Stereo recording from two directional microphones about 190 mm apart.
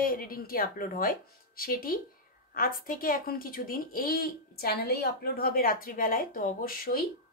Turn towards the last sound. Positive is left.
turn(degrees=50)  # may be behind; listen again after turning